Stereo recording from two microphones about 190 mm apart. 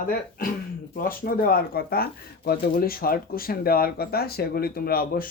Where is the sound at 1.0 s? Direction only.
50° left (ahead or behind).